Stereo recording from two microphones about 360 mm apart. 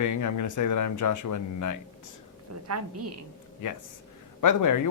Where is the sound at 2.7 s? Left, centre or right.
Right.